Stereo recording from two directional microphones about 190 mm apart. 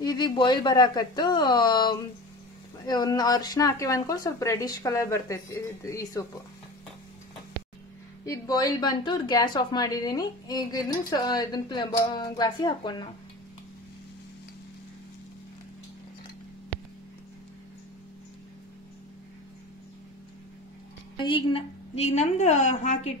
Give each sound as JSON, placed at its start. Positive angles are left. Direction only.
{"t": 0.0, "sound": "a woman's voice", "side_deg": 25}
{"t": 8.3, "sound": "a woman's voice", "side_deg": 20}
{"t": 21.2, "sound": "a woman's voice", "side_deg": 25}